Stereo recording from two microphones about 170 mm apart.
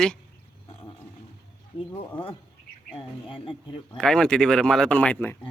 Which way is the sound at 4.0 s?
5° left (ahead or behind).